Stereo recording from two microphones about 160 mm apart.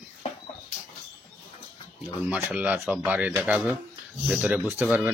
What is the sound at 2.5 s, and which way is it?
Speech, 10° right (ahead or behind).